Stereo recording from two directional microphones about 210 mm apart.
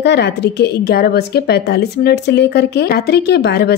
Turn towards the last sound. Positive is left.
turn(degrees=50)  # may be behind; listen again after turning